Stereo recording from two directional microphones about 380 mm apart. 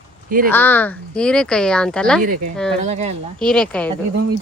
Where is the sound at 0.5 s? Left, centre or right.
Centre.